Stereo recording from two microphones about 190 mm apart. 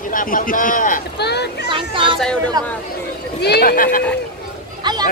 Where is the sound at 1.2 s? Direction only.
60° left (ahead or behind).